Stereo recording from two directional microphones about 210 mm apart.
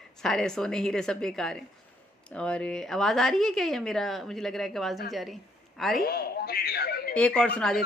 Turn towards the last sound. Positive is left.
turn(degrees=5)  # may be behind; listen again after turning